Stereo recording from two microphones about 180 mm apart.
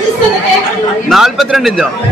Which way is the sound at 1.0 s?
Centre (ahead or behind).